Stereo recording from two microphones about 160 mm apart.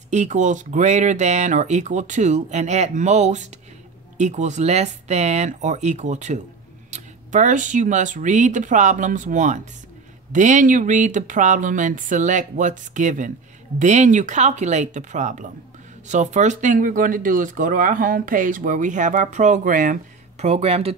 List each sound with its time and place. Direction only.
0.1 s speech: 50° right (ahead or behind)